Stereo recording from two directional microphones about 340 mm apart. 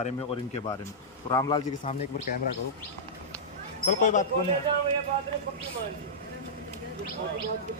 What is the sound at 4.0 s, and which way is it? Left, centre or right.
Speech, left.